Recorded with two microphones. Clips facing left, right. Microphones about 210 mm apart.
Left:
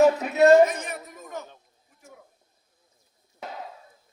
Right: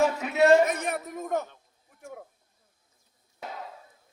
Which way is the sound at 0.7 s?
60° right (ahead or behind).